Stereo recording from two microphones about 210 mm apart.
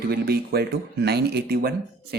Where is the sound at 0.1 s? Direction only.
50° right (ahead or behind).